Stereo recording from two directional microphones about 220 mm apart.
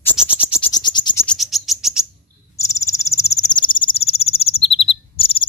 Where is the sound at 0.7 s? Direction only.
20° left (ahead or behind).